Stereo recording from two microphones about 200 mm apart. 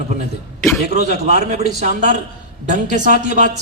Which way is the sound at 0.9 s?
35° right (ahead or behind).